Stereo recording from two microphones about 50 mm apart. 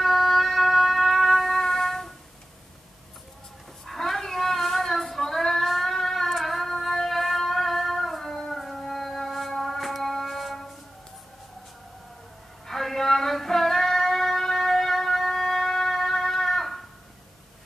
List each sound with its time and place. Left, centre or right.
0.0 s a sound: centre
3.8 s child singing: centre
12.6 s child singing: centre